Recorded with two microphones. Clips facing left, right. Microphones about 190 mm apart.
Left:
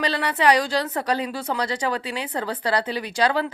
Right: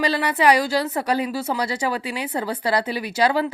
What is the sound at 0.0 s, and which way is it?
A woman's voice, 10° right (ahead or behind).